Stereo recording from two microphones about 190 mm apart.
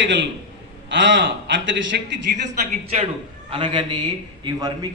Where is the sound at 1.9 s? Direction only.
55° right (ahead or behind).